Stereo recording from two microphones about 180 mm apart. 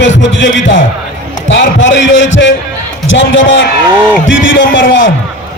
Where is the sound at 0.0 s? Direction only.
90° left.